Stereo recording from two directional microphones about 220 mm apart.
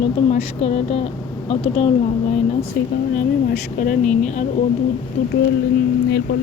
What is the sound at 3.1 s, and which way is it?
Speech, 35° left (ahead or behind).